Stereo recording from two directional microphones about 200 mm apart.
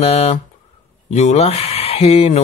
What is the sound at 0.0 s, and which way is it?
Speech, 30° left (ahead or behind).